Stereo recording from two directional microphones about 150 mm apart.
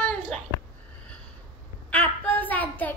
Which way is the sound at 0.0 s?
5° left (ahead or behind).